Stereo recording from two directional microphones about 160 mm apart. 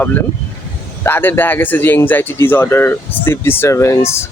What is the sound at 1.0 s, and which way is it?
Speech, 15° left (ahead or behind).